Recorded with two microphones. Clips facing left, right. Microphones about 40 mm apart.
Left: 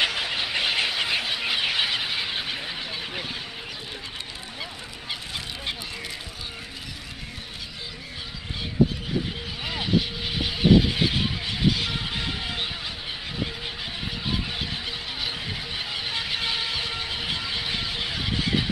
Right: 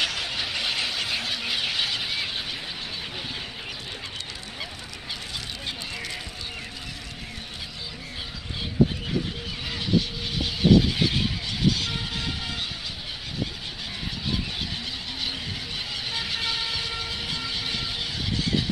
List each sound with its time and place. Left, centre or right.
0.0 s vehicle: left
9.7 s vehicle: centre
15.9 s vehicle: centre